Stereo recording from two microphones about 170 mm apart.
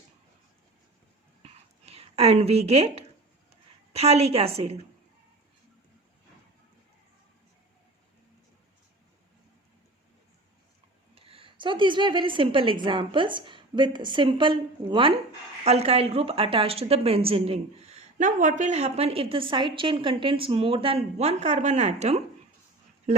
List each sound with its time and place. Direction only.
1.9 s a woman's voice: 35° right (ahead or behind)
11.1 s a woman's voice: 35° right (ahead or behind)